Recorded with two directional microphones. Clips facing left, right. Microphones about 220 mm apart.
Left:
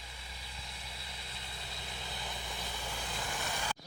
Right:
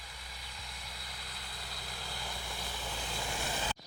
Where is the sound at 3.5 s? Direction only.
20° right (ahead or behind).